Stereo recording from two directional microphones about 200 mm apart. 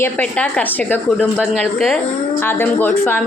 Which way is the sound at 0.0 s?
5° left (ahead or behind).